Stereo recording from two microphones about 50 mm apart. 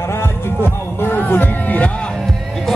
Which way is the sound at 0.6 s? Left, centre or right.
Left.